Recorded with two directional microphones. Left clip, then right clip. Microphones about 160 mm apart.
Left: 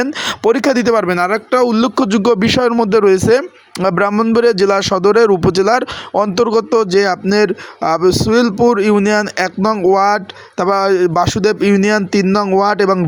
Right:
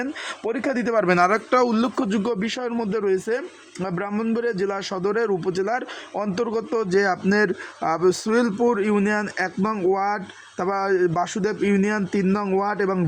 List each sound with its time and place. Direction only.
0.0 s a man's voice: 35° left (ahead or behind)
1.0 s speech: 15° left (ahead or behind)
1.5 s a man's voice: 25° left (ahead or behind)
6.9 s speech: 15° left (ahead or behind)